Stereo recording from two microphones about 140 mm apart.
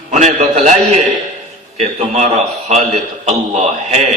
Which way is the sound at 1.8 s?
55° right (ahead or behind).